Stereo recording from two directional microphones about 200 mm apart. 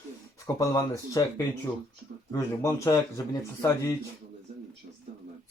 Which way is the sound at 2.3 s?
15° left (ahead or behind).